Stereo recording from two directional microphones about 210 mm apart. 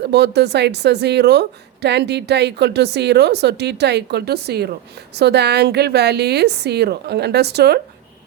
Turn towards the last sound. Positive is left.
turn(degrees=-50)  # may be behind; listen again after turning